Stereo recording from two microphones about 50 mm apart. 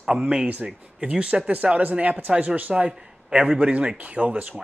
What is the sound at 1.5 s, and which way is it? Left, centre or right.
A man's voice, right.